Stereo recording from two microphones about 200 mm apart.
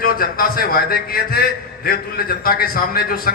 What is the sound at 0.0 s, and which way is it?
A man's voice, 45° left (ahead or behind).